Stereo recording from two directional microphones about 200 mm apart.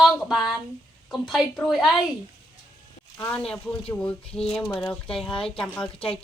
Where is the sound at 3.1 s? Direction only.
15° left (ahead or behind).